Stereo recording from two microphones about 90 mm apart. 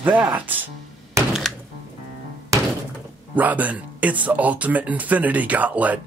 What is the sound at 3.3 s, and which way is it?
Speech, 20° right (ahead or behind).